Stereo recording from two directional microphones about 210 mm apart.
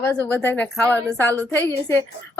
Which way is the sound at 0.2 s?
10° left (ahead or behind).